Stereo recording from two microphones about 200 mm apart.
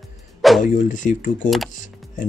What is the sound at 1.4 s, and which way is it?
Speech, centre (ahead or behind).